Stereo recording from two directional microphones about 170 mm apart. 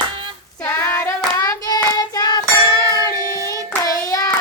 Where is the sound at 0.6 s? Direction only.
15° left (ahead or behind).